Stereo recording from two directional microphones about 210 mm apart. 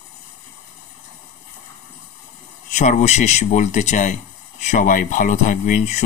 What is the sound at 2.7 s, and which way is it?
A man's voice, 35° left (ahead or behind).